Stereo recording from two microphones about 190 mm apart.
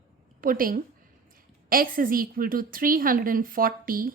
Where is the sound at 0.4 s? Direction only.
50° right (ahead or behind).